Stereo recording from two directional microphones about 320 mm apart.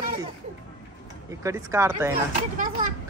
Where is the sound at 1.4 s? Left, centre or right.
Centre.